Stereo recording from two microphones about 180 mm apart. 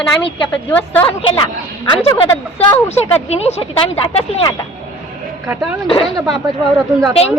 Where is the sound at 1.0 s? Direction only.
30° left (ahead or behind).